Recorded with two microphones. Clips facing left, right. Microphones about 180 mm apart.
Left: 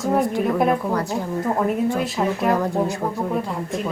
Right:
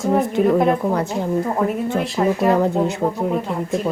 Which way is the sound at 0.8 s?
25° right (ahead or behind).